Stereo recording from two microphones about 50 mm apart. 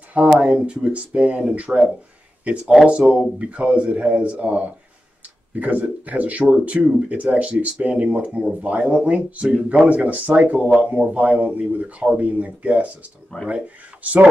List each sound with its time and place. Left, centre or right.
0.4 s speech: right
2.6 s speech: centre; by 12.9 s right
13.3 s speech: left
14.0 s speech: right